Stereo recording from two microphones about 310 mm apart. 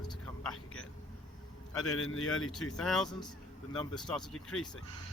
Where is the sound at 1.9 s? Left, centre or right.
Left.